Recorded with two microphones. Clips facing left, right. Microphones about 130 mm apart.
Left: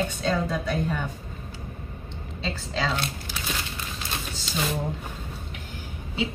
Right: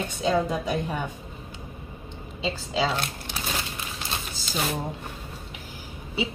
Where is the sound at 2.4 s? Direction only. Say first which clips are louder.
Right 3 dB; 10° right (ahead or behind).